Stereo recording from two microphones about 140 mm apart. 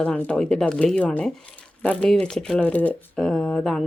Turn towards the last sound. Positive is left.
turn(degrees=5)  # may be behind; listen again after turning